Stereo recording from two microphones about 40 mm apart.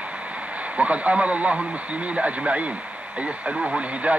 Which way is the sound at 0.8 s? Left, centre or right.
Right.